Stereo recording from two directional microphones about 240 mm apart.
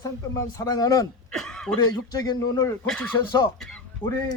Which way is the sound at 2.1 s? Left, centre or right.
Centre.